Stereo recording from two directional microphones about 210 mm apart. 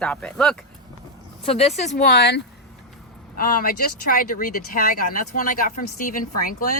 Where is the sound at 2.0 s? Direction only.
55° left (ahead or behind).